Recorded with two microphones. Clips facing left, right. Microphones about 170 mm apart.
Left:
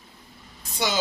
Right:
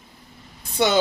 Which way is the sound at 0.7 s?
60° right (ahead or behind).